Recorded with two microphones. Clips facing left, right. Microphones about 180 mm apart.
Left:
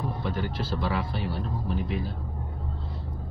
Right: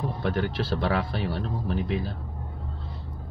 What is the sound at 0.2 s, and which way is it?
Speech, 70° right (ahead or behind).